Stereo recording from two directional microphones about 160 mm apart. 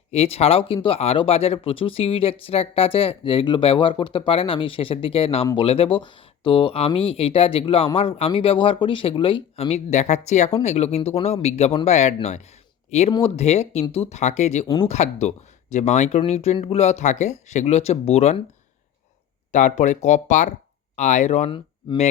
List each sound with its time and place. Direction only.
0.1 s speech: 40° left (ahead or behind)
19.5 s speech: 50° left (ahead or behind)